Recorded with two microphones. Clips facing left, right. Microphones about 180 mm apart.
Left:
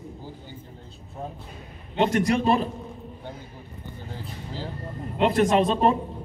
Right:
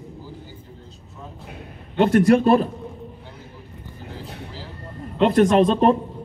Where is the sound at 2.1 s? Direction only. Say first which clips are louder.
Right 9 dB; 50° right (ahead or behind).